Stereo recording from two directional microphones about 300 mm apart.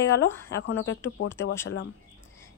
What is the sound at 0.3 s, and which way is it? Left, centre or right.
Speech, centre.